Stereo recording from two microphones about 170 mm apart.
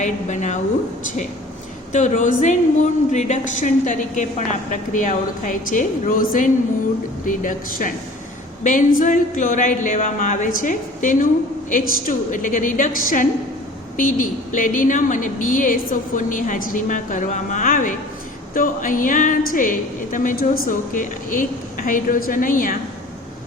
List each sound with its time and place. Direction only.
0.0 s speech: 45° left (ahead or behind)
1.9 s speech: 45° left (ahead or behind)